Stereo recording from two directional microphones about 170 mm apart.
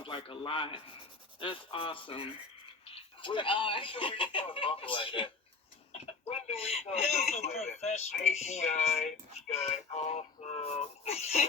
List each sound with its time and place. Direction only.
0.0 s a man's voice: 30° left (ahead or behind)